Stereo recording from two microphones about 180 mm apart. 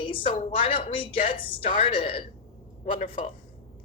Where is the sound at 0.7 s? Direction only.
30° left (ahead or behind).